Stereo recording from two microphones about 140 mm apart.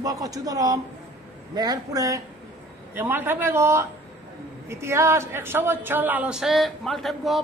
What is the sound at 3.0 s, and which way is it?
A man's voice, 15° right (ahead or behind).